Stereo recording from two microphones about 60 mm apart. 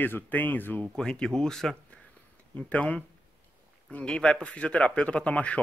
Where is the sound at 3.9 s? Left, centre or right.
Centre.